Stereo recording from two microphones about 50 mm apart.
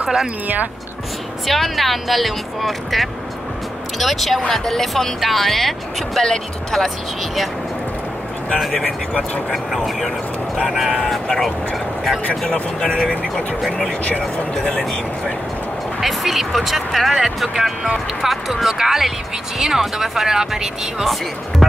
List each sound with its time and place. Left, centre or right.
0.0 s speech: centre
1.5 s speech: centre
8.5 s speech: centre
8.8 s speech: left
9.8 s speech: centre
12.5 s speech: centre
14.6 s speech: centre
21.0 s speech: centre